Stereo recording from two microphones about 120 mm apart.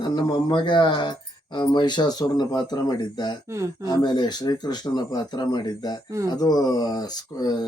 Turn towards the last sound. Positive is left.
turn(degrees=35)  # may be behind; listen again after turning